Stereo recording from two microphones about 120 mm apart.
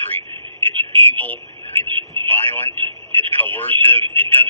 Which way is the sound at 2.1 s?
15° left (ahead or behind).